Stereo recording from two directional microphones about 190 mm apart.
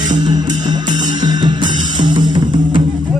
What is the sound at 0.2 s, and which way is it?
Music, 20° right (ahead or behind).